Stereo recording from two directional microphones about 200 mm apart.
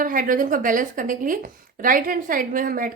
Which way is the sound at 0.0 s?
45° right (ahead or behind).